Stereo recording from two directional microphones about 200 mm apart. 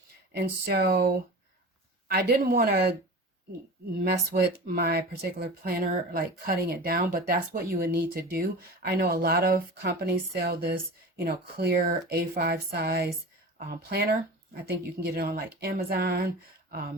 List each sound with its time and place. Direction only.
0.3 s speech: 55° right (ahead or behind)
3.9 s speech: 50° right (ahead or behind)